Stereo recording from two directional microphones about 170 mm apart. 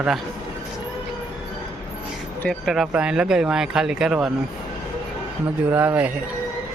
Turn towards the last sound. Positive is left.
turn(degrees=-10)  # may be behind; listen again after turning